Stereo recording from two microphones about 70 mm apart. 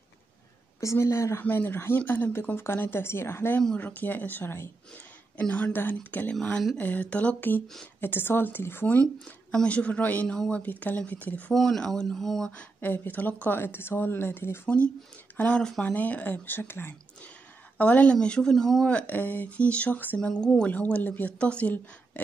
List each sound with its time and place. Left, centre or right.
0.7 s speech: left
1.4 s speech: left
9.0 s a woman's voice: centre
10.6 s speech: left
11.5 s speech: centre
12.8 s speech: left
13.6 s speech: left
15.3 s speech: centre; by 16.9 s left
17.7 s a woman's voice: left; by 18.9 s centre
18.9 s speech: left
20.2 s a woman's voice: centre
20.7 s a woman's voice: left